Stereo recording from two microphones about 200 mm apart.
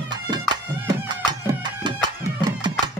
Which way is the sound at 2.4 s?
20° right (ahead or behind).